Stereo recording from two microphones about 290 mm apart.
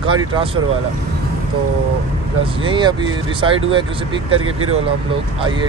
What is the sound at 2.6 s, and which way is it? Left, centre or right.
Speech, centre.